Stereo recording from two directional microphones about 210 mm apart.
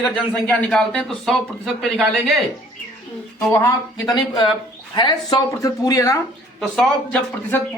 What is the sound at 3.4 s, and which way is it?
Speech, 10° left (ahead or behind).